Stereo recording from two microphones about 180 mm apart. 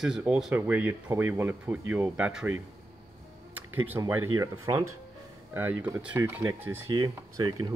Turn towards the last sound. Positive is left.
turn(degrees=-20)  # may be behind; listen again after turning